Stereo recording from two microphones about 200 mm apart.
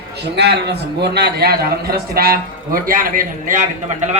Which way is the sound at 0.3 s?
55° right (ahead or behind).